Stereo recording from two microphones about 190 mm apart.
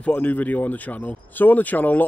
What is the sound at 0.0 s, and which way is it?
Speech, 10° left (ahead or behind).